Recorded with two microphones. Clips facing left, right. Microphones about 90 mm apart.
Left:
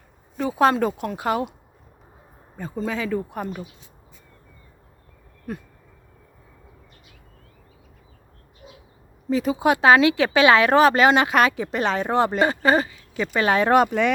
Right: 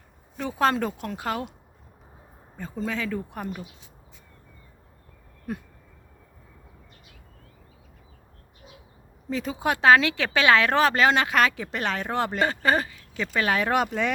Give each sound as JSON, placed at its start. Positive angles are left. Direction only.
{"t": 0.3, "sound": "speech", "side_deg": 10}
{"t": 2.6, "sound": "speech", "side_deg": 10}
{"t": 5.5, "sound": "a sound", "side_deg": -10}
{"t": 8.6, "sound": "bird", "side_deg": 5}
{"t": 9.3, "sound": "speech", "side_deg": 10}
{"t": 13.2, "sound": "speech", "side_deg": 30}
{"t": 13.7, "sound": "speech", "side_deg": 45}